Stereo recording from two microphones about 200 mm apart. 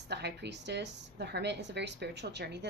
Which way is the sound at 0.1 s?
55° right (ahead or behind).